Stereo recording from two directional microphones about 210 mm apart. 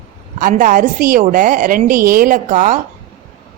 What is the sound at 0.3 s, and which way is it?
A woman's voice, 40° right (ahead or behind).